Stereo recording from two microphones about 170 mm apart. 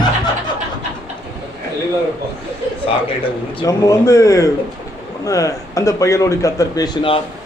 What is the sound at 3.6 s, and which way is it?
Speech, 20° left (ahead or behind).